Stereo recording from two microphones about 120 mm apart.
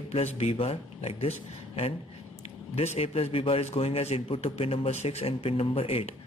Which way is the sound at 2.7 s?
60° left (ahead or behind).